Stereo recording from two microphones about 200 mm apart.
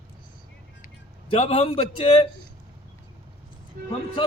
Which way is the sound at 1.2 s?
30° left (ahead or behind).